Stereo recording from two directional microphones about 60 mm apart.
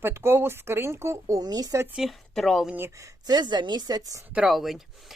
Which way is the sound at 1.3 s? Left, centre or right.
Right.